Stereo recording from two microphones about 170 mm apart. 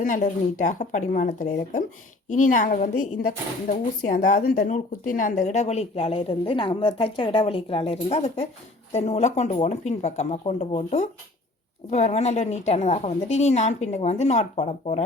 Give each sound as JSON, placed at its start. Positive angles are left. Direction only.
{"t": 0.0, "sound": "speech", "side_deg": 50}